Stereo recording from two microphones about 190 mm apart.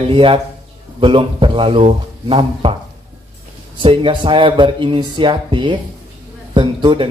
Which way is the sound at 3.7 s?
25° right (ahead or behind).